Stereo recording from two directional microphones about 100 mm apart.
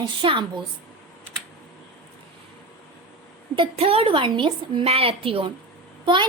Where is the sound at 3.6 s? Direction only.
75° right (ahead or behind); by 4.9 s 55° right (ahead or behind).